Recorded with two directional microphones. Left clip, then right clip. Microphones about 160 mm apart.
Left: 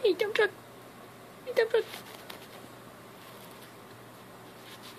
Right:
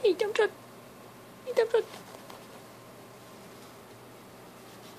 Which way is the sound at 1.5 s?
5° right (ahead or behind).